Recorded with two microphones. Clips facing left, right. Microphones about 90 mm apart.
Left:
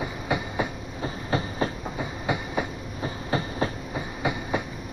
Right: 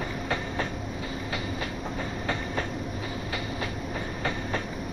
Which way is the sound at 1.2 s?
35° left (ahead or behind).